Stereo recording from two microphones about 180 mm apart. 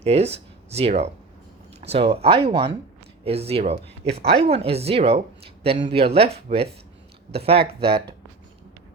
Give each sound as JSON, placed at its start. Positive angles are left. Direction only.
{"t": 0.0, "sound": "speech", "side_deg": -35}
{"t": 4.2, "sound": "speech", "side_deg": -65}
{"t": 4.4, "sound": "speech", "side_deg": -35}